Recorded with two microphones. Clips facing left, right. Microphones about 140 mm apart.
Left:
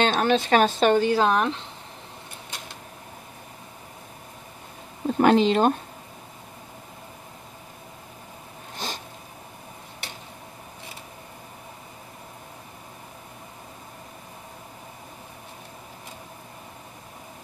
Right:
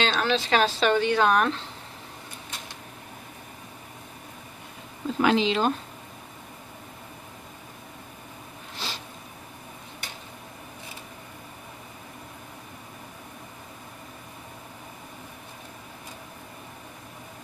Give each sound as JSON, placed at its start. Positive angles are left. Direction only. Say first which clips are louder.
{"t": 0.0, "sound": "a woman's voice", "louder": "left 4 dB", "side_deg": 50}
{"t": 1.2, "sound": "speech", "louder": "even", "side_deg": 20}
{"t": 5.0, "sound": "speech", "louder": "left 4 dB", "side_deg": 50}
{"t": 8.7, "sound": "a sound", "louder": "left 3 dB", "side_deg": 50}